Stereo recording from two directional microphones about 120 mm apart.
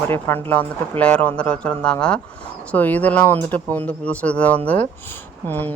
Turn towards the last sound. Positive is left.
turn(degrees=15)  # may be behind; listen again after turning